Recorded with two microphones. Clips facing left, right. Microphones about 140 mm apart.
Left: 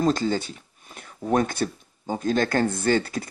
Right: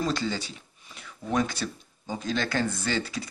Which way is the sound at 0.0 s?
45° left (ahead or behind).